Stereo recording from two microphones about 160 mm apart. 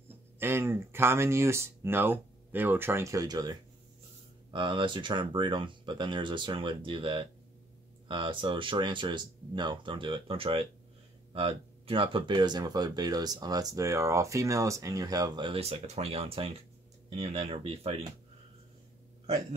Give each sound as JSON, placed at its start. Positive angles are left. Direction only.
{"t": 0.4, "sound": "speech", "side_deg": -15}
{"t": 15.7, "sound": "speech", "side_deg": -45}